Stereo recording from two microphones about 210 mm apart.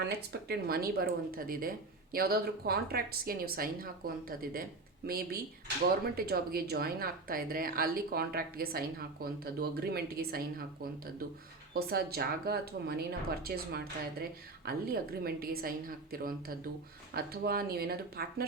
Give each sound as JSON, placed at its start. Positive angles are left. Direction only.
{"t": 0.0, "sound": "speech", "side_deg": -50}